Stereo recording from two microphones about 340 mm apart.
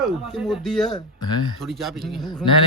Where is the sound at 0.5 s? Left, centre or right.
Centre.